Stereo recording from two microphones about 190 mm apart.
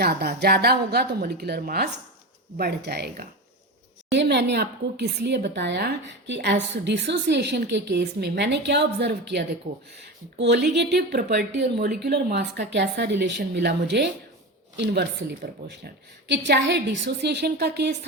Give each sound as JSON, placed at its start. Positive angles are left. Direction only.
{"t": 0.0, "sound": "a woman's voice", "side_deg": -55}